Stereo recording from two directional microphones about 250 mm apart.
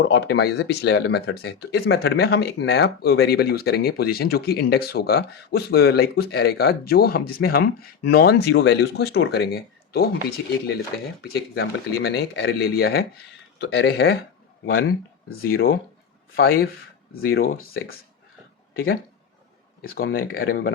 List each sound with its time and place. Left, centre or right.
0.0 s speech: left
11.2 s speech: left